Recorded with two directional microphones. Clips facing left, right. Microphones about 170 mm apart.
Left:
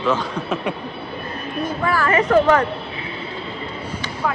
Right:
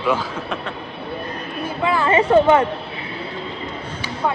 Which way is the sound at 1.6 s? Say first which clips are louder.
Even; 10° right (ahead or behind).